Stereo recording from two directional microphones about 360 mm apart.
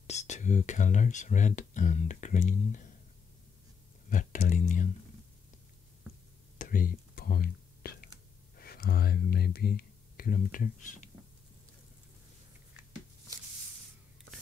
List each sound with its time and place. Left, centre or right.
0.0 s speech: centre
4.1 s speech: left
6.6 s whispering: left
8.5 s speech: left